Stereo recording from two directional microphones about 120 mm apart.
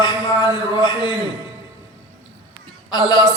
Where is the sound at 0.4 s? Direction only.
40° left (ahead or behind).